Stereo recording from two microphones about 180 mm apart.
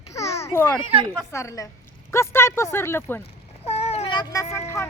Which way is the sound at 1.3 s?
15° left (ahead or behind).